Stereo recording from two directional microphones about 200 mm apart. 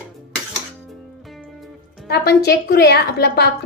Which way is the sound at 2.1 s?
55° left (ahead or behind).